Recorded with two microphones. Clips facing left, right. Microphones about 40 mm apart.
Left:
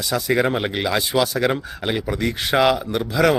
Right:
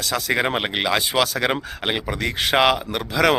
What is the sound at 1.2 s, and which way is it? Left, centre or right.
Speech, right.